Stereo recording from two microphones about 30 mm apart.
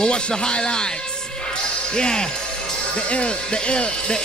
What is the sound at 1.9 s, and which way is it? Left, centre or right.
Speech, left.